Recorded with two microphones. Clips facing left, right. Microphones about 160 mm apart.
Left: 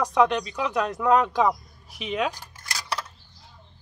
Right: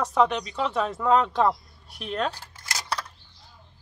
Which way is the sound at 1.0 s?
10° left (ahead or behind).